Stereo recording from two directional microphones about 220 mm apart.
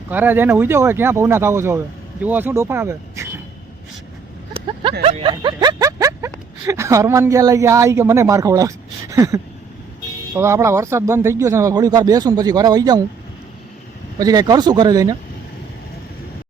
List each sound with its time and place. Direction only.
0.1 s speech: 10° right (ahead or behind)
4.5 s vehicle: 25° right (ahead or behind)
5.0 s a sound: 25° right (ahead or behind)
10.3 s speech: 10° right (ahead or behind)
14.2 s speech: 15° right (ahead or behind)